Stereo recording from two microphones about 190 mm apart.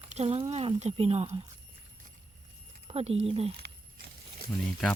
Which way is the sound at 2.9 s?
30° right (ahead or behind).